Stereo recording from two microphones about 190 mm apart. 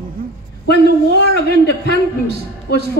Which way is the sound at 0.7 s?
65° left (ahead or behind).